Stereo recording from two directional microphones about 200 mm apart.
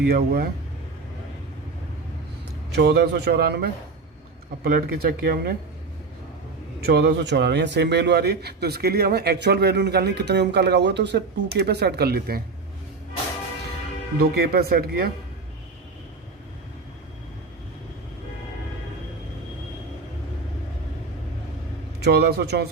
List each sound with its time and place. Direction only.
0.0 s speech: 50° right (ahead or behind)
2.7 s a man's voice: 55° right (ahead or behind)
6.8 s a man's voice: 55° right (ahead or behind)
14.2 s speech: 50° right (ahead or behind)
22.0 s speech: 50° right (ahead or behind)